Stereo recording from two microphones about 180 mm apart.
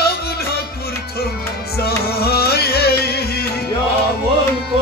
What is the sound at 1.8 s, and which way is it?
Music, 60° left (ahead or behind).